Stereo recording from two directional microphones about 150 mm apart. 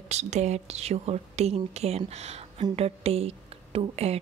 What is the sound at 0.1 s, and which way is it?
Speech, 50° right (ahead or behind).